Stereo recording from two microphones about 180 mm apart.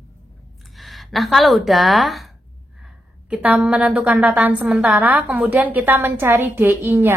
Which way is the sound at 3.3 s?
5° right (ahead or behind).